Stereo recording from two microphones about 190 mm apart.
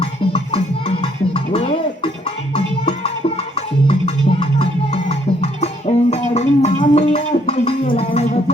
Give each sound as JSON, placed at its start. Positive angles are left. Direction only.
{"t": 0.0, "sound": "music", "side_deg": 30}
{"t": 6.3, "sound": "gargling", "side_deg": 35}